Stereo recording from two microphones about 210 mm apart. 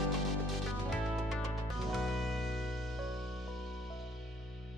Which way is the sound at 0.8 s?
Centre (ahead or behind).